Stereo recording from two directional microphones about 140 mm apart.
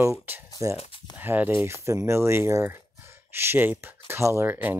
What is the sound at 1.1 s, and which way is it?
Speech, 15° right (ahead or behind).